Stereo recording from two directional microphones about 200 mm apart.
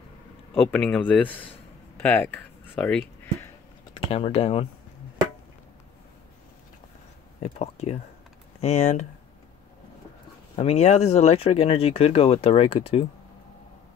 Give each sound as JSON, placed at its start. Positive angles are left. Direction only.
{"t": 0.6, "sound": "speech", "side_deg": 5}
{"t": 4.1, "sound": "speech", "side_deg": 30}
{"t": 7.3, "sound": "speech", "side_deg": 35}
{"t": 10.5, "sound": "speech", "side_deg": 35}